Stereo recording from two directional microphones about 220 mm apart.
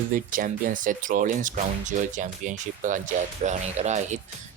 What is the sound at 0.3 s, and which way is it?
Speech, 40° right (ahead or behind).